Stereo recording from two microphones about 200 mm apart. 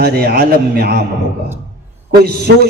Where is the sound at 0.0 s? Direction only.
50° right (ahead or behind).